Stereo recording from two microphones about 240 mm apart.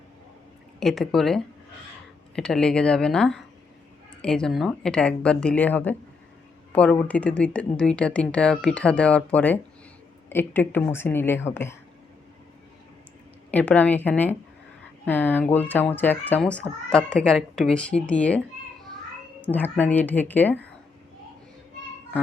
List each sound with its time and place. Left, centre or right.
0.8 s speech: centre
13.5 s speech: centre
19.5 s speech: centre